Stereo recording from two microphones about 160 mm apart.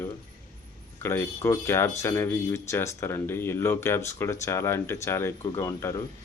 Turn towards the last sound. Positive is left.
turn(degrees=15)  # may be behind; listen again after turning